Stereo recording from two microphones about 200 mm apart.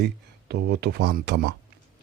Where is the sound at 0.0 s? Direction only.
55° right (ahead or behind).